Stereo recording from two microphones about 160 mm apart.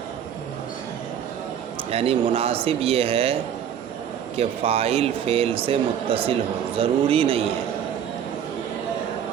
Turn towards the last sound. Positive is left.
turn(degrees=-35)  # may be behind; listen again after turning